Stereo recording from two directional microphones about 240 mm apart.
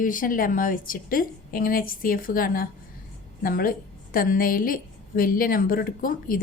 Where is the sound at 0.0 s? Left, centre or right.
Left.